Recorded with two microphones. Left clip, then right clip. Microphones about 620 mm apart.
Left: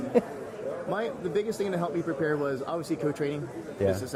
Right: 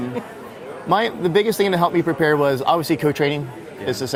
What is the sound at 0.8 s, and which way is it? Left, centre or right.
Speech, right.